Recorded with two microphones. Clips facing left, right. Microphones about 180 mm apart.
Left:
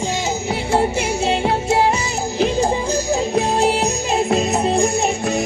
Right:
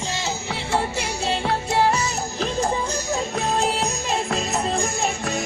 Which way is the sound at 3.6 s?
15° left (ahead or behind).